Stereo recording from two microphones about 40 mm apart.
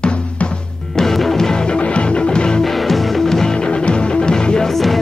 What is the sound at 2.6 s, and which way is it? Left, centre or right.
Music, centre.